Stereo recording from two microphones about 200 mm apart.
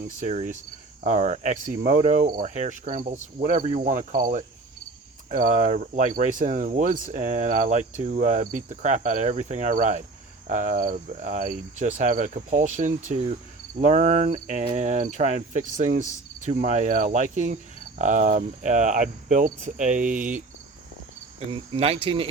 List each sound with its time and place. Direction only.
0.2 s cricket: 40° right (ahead or behind)
21.5 s speech: 30° right (ahead or behind)